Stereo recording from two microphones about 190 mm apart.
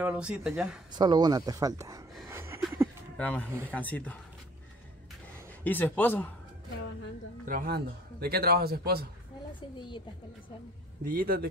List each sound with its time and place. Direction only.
0.0 s speech: 5° right (ahead or behind)
0.9 s speech: 20° right (ahead or behind)
2.2 s a sound: 15° right (ahead or behind)
3.2 s speech: 10° left (ahead or behind)
5.6 s speech: 10° left (ahead or behind)
7.4 s speech: 50° right (ahead or behind)
9.8 s a woman's voice: 25° left (ahead or behind)
11.1 s speech: 50° right (ahead or behind)